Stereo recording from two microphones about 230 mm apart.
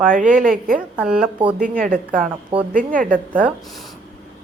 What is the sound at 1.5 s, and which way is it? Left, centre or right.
Speech, right.